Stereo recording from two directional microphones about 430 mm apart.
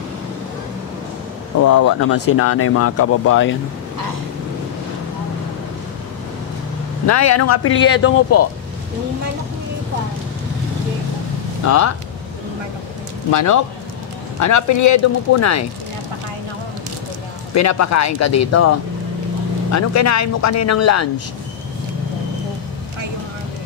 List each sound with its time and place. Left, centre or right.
1.6 s speech: left
7.1 s speech: left
11.6 s speech: left
13.3 s speech: left
17.6 s speech: left